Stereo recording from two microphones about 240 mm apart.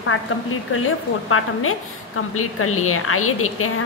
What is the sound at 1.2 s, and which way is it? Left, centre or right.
Speech, left.